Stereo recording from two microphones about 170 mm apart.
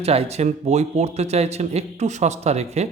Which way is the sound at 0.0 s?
35° right (ahead or behind).